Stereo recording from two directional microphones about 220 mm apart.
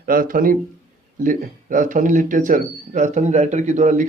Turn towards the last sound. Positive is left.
turn(degrees=-35)  # may be behind; listen again after turning